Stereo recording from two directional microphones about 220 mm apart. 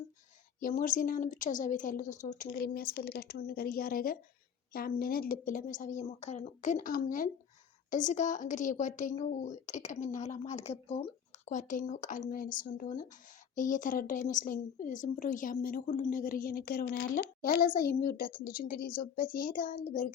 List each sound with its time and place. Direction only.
0.6 s a woman's voice: 40° left (ahead or behind)